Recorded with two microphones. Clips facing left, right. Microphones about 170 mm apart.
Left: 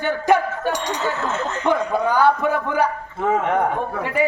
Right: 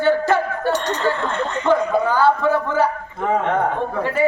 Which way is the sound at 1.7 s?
15° left (ahead or behind).